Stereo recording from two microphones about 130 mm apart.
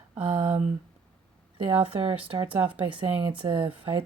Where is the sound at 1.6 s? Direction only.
40° right (ahead or behind).